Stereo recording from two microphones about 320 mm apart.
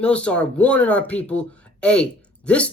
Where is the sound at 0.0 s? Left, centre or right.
Centre.